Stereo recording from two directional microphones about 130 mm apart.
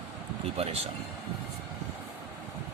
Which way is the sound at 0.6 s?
50° right (ahead or behind).